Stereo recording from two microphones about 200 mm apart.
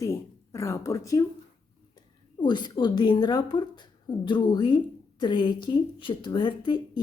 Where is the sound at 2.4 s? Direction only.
20° left (ahead or behind).